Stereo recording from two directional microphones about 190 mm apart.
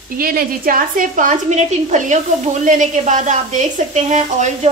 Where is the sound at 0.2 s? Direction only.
50° right (ahead or behind).